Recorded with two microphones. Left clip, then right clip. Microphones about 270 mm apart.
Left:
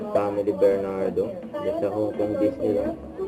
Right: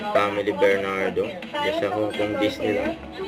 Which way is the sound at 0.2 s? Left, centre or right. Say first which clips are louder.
Even; right.